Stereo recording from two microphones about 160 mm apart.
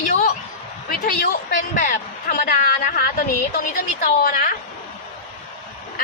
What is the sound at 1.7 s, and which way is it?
Speech, 60° left (ahead or behind).